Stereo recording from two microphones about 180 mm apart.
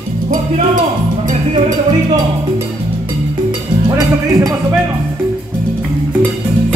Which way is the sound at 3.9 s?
20° right (ahead or behind).